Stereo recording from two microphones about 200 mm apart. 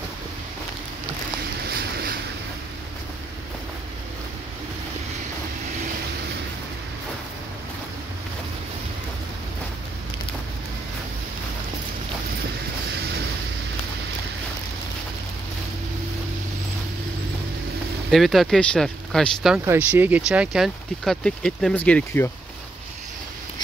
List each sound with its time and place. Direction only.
1.7 s boat: 50° right (ahead or behind)
18.1 s speech: centre (ahead or behind)
19.6 s speech: 10° right (ahead or behind); by 22.3 s 10° left (ahead or behind)